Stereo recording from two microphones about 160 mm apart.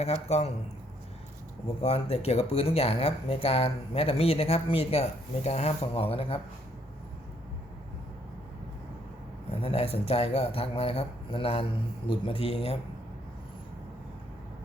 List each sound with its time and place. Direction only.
0.0 s speech: 40° left (ahead or behind)
1.8 s speech: 40° left (ahead or behind)
9.5 s speech: 35° left (ahead or behind)